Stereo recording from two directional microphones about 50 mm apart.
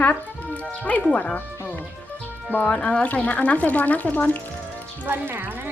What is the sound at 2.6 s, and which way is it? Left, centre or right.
Speech, centre.